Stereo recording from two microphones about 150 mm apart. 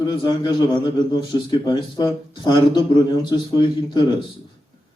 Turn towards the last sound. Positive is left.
turn(degrees=30)  # may be behind; listen again after turning